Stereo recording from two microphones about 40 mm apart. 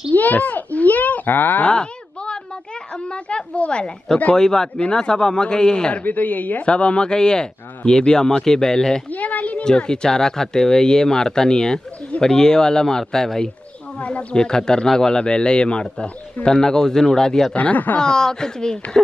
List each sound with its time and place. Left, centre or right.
0.1 s a child's voice: left
1.6 s a sound: left
4.4 s speech: centre
6.0 s a child's voice: left
6.6 s speech: left
9.1 s a sound: left
9.7 s speech: centre
13.9 s speech: left
14.3 s speech: centre
17.6 s a child's voice: left
17.9 s speech: centre